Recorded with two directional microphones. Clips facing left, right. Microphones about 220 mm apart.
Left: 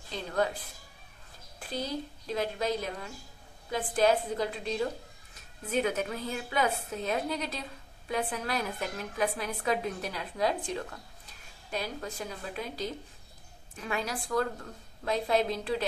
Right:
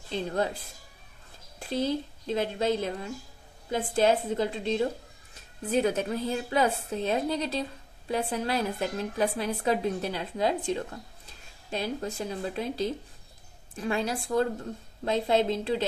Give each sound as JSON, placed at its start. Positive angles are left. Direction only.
{"t": 0.1, "sound": "a woman's voice", "side_deg": -30}
{"t": 1.7, "sound": "a woman's voice", "side_deg": -25}